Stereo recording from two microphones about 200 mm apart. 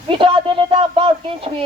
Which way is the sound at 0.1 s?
25° right (ahead or behind).